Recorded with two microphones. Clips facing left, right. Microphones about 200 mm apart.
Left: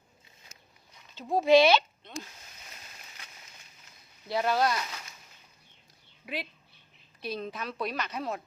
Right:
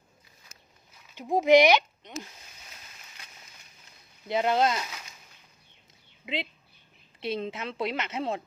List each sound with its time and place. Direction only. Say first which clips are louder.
1.1 s speech: right 2 dB; 15° right (ahead or behind)
4.3 s a woman's voice: right 2 dB; 20° right (ahead or behind)
6.2 s a woman's voice: right 3 dB; 20° right (ahead or behind)